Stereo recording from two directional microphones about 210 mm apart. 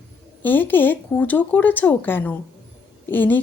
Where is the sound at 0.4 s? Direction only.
10° left (ahead or behind).